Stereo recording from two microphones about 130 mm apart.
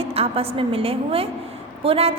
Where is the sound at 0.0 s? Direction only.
50° right (ahead or behind).